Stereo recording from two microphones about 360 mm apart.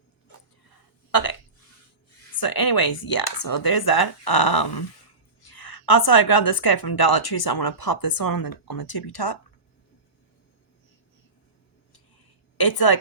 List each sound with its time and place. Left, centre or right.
0.6 s a sound: left
2.3 s a woman's voice: left
5.4 s a woman's voice: left
12.5 s a woman's voice: left